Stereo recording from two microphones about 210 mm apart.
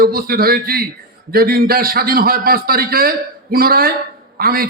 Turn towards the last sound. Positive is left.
turn(degrees=-45)  # may be behind; listen again after turning